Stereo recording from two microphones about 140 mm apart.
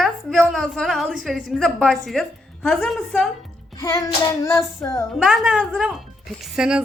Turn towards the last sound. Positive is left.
turn(degrees=-5)  # may be behind; listen again after turning